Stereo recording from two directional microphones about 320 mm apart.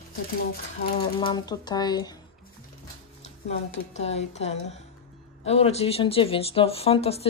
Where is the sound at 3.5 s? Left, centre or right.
Centre.